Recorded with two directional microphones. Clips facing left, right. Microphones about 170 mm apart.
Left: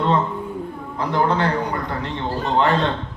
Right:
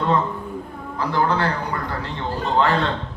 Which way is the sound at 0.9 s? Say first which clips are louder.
Left 1 dB; 20° left (ahead or behind).